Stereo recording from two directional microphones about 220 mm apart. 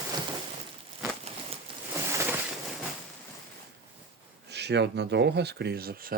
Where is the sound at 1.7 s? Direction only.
20° right (ahead or behind).